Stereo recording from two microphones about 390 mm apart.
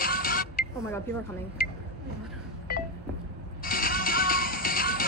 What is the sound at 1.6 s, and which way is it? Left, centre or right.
Speech, left.